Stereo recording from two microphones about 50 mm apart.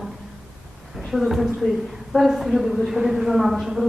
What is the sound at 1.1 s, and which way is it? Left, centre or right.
A woman's voice, centre.